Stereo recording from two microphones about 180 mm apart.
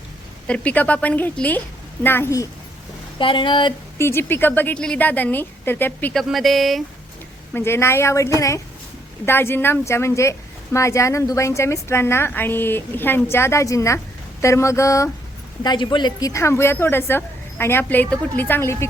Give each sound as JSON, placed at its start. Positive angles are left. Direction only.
{"t": 0.4, "sound": "speech", "side_deg": 5}
{"t": 3.2, "sound": "speech", "side_deg": 25}
{"t": 3.9, "sound": "speech", "side_deg": 15}
{"t": 7.5, "sound": "speech", "side_deg": 15}